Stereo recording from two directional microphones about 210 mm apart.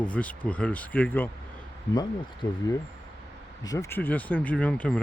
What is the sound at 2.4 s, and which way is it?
Speech, 15° left (ahead or behind).